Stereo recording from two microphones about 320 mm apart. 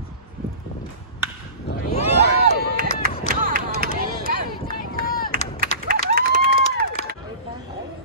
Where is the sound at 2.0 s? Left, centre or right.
Centre.